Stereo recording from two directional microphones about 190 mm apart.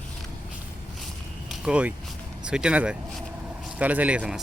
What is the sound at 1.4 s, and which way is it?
Speech, 5° right (ahead or behind).